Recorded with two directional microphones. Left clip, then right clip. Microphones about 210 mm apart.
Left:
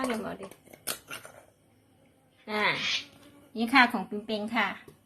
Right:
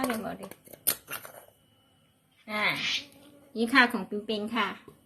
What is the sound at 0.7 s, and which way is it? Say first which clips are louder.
Scissors: right 3 dB; 35° right (ahead or behind).